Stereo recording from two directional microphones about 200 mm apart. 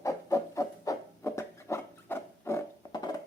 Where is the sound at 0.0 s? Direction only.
15° left (ahead or behind).